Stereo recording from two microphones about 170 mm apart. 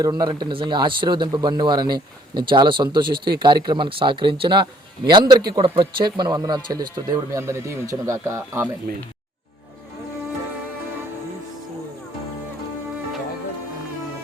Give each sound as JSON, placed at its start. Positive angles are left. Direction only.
{"t": 0.0, "sound": "speech", "side_deg": -25}